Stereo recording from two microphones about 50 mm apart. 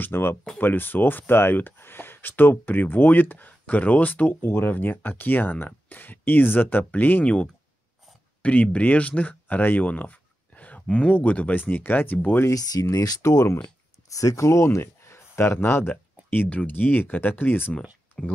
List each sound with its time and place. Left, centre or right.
0.0 s speech: left
8.4 s speech: left
12.4 s speech: left
14.0 s speech: left
15.0 s a sound: left
16.4 s speech: left
18.2 s speech: centre